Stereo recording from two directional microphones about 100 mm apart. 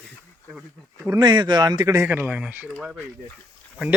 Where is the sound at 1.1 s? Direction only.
45° right (ahead or behind).